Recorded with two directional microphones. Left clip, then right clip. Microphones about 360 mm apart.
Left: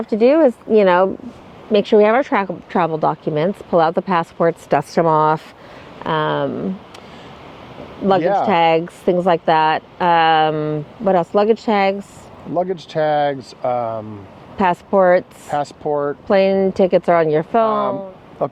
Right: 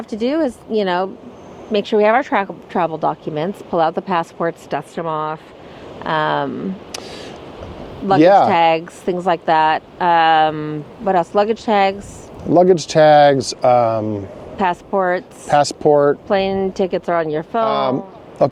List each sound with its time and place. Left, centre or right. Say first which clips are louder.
0.1 s speech: left 7 dB; centre; by 5.4 s left
6.0 s speech: right 1 dB; centre
8.2 s speech: right 7 dB; right
8.4 s speech: even; centre
12.5 s speech: right 8 dB; right
14.6 s speech: left 3 dB; centre
15.4 s speech: right 7 dB; right
16.3 s speech: left 3 dB; centre
17.7 s speech: right 1 dB; right